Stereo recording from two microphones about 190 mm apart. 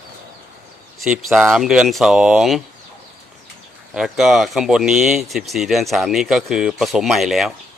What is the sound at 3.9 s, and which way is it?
Speech, centre (ahead or behind).